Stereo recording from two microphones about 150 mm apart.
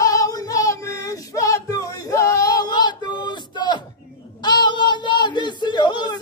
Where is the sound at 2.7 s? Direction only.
30° left (ahead or behind).